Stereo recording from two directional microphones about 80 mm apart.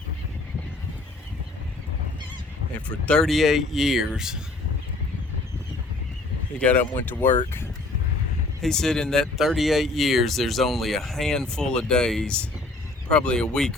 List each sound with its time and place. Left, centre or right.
2.7 s speech: centre
3.2 s speech: centre
6.6 s speech: centre
8.6 s speech: centre